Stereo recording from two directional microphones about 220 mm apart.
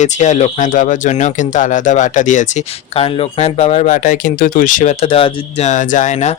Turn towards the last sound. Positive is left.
turn(degrees=35)  # may be behind; listen again after turning